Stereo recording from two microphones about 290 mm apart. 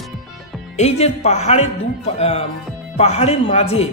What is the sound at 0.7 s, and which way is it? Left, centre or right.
A man's voice, left.